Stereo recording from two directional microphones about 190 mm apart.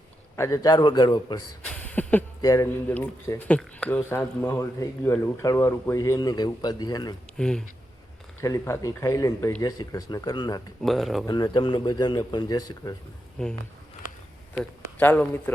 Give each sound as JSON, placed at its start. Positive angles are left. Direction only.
{"t": 0.3, "sound": "speech", "side_deg": 15}
{"t": 1.7, "sound": "a sound", "side_deg": 10}
{"t": 2.4, "sound": "speech", "side_deg": 15}
{"t": 7.3, "sound": "speech", "side_deg": 5}
{"t": 8.4, "sound": "speech", "side_deg": 15}
{"t": 10.8, "sound": "speech", "side_deg": 0}
{"t": 11.3, "sound": "speech", "side_deg": 20}
{"t": 13.4, "sound": "speech", "side_deg": 5}